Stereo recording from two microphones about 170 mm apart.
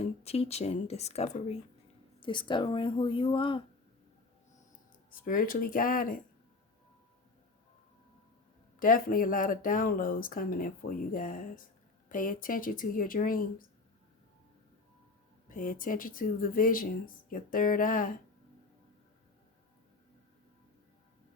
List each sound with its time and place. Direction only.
0.0 s speech: 35° left (ahead or behind)
5.1 s speech: 55° left (ahead or behind)
8.8 s speech: 55° left (ahead or behind)
15.4 s speech: 55° left (ahead or behind)